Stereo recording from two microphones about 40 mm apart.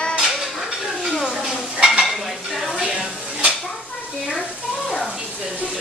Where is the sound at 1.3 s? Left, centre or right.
Centre.